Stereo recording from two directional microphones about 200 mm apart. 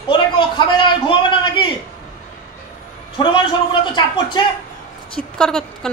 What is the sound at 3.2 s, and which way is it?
Speech, 20° left (ahead or behind).